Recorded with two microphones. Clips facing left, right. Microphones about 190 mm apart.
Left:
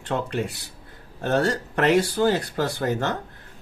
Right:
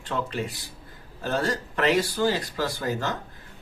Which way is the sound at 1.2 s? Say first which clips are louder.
Left 4 dB; 60° left (ahead or behind).